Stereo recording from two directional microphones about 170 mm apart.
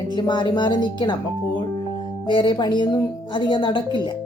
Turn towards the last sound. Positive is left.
turn(degrees=30)  # may be behind; listen again after turning